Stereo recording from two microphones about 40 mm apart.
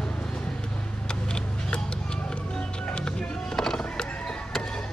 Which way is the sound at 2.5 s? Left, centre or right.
Left.